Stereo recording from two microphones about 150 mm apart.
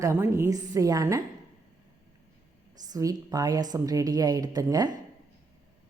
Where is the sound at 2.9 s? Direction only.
25° right (ahead or behind).